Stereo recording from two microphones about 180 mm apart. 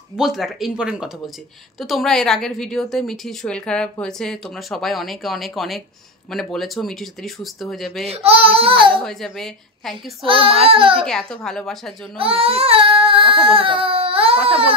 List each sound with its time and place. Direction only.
0.1 s a woman's voice: centre (ahead or behind)
8.1 s speech: 35° right (ahead or behind)
9.0 s a woman's voice: centre (ahead or behind)
10.2 s speech: 30° right (ahead or behind)
11.1 s a woman's voice: 5° left (ahead or behind)
12.2 s baby cry: 30° right (ahead or behind)